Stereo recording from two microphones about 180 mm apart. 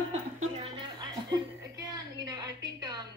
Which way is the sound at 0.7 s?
25° right (ahead or behind).